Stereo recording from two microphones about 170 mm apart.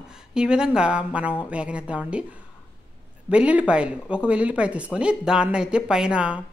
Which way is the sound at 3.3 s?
5° right (ahead or behind).